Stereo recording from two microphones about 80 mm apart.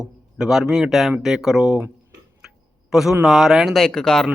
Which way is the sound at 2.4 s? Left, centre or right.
Centre.